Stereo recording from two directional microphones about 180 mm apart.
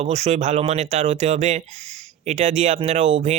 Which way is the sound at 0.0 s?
35° right (ahead or behind).